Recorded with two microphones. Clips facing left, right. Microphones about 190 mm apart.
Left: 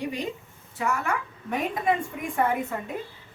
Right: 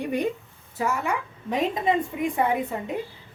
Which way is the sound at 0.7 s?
25° right (ahead or behind).